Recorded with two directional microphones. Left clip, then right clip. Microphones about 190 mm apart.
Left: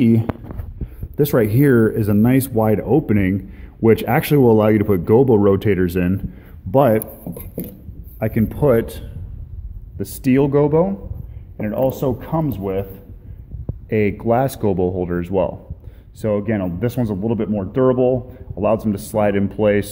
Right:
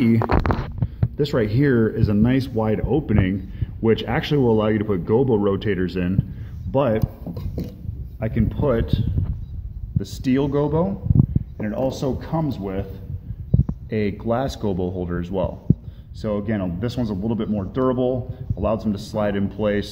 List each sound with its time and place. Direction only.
1.1 s speech: 25° left (ahead or behind)
13.8 s speech: 30° left (ahead or behind)